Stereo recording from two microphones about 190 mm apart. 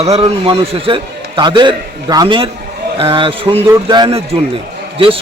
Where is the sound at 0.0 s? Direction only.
30° right (ahead or behind).